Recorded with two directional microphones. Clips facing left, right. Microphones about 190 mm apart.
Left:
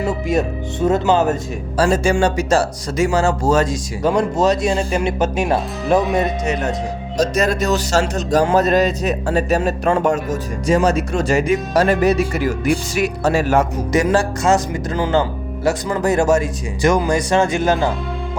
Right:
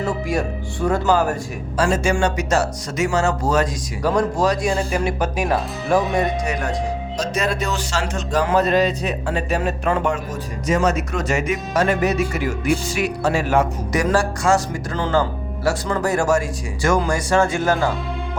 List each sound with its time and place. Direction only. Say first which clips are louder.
0.3 s speech: left 4 dB; 20° left (ahead or behind)
1.7 s speech: left 3 dB; 35° left (ahead or behind)
7.2 s speech: left 6 dB; 40° left (ahead or behind)
13.9 s speech: left 3 dB; 25° left (ahead or behind)
15.6 s speech: left 3 dB; 20° left (ahead or behind)